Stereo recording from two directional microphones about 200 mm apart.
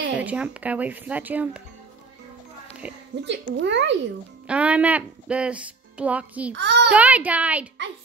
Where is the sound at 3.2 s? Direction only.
60° right (ahead or behind).